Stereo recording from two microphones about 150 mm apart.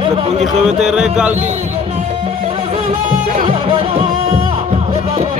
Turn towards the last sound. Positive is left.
turn(degrees=-35)  # may be behind; listen again after turning